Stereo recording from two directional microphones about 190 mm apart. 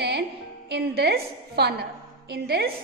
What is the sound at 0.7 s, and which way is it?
A woman's voice, 60° right (ahead or behind).